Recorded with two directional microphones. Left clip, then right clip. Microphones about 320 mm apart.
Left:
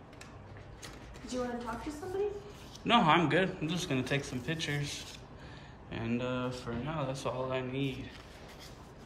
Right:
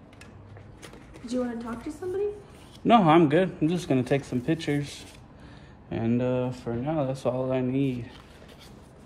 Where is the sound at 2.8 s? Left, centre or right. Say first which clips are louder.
Right 7 dB; centre.